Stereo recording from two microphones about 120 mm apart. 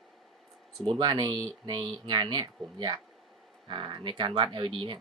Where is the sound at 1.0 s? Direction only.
35° right (ahead or behind).